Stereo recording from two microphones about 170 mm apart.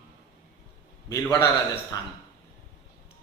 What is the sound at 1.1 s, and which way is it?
Speech, 20° left (ahead or behind).